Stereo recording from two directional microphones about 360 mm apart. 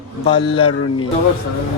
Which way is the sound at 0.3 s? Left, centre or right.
Centre.